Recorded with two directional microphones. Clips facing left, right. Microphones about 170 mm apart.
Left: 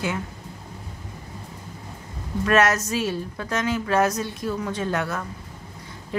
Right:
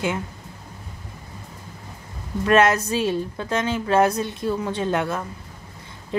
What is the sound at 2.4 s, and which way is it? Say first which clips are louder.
Speech: right 3 dB; 25° right (ahead or behind).